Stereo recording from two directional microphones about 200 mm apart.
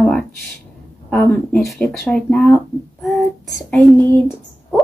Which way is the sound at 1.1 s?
10° left (ahead or behind).